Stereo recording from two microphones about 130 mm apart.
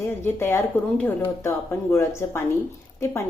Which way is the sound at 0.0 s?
20° left (ahead or behind).